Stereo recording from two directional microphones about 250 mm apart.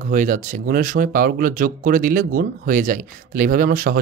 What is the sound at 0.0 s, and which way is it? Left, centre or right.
Speech, right.